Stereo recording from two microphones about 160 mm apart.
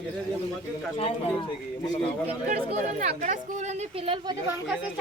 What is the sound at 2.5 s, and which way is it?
Speech, 50° right (ahead or behind).